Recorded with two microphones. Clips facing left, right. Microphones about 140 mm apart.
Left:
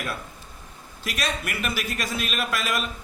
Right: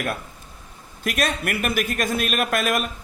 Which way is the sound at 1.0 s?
50° right (ahead or behind).